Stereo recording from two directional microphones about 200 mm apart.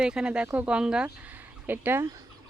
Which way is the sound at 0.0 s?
5° right (ahead or behind).